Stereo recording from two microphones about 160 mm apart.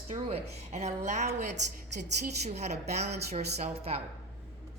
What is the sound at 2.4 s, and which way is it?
A woman's voice, 45° right (ahead or behind).